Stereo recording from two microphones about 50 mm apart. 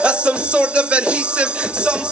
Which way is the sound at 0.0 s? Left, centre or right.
Right.